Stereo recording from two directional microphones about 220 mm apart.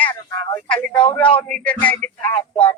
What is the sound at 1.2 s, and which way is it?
Speech, 5° left (ahead or behind).